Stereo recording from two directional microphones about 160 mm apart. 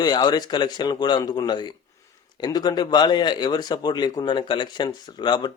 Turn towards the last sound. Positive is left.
turn(degrees=30)  # may be behind; listen again after turning